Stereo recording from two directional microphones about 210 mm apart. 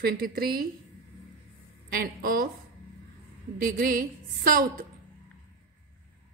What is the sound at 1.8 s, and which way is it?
Speech, 45° right (ahead or behind).